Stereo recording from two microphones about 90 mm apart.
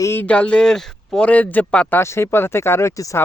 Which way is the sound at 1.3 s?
20° left (ahead or behind).